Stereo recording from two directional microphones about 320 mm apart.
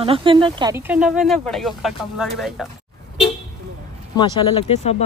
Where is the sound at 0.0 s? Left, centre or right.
Centre.